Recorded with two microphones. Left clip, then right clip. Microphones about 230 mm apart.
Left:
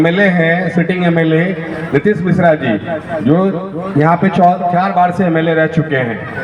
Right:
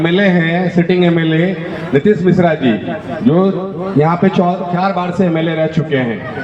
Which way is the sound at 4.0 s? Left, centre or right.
Left.